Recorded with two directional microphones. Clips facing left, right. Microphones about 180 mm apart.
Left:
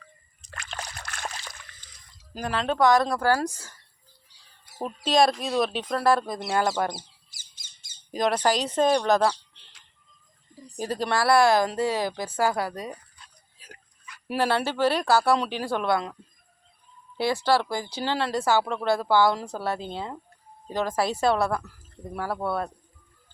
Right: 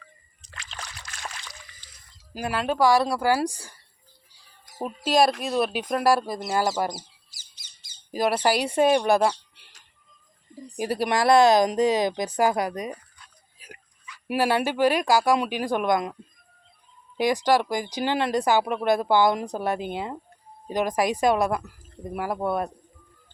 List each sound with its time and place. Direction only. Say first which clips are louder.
0.4 s splash: left 3 dB; 50° left (ahead or behind)
2.3 s speech: right 1 dB; 10° right (ahead or behind)
5.0 s speech: even; 5° right (ahead or behind)
7.3 s bird: even; 50° left (ahead or behind)
8.1 s speech: right 1 dB; 5° right (ahead or behind)
10.8 s speech: right 2 dB; 10° right (ahead or behind)
14.3 s speech: right 2 dB; 10° right (ahead or behind)
17.2 s speech: right 2 dB; 15° right (ahead or behind)